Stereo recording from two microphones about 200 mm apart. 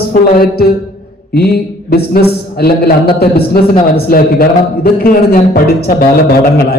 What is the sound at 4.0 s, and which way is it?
Speech, 50° left (ahead or behind).